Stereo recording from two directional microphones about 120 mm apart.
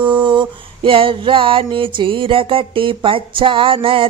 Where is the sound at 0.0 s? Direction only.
40° right (ahead or behind).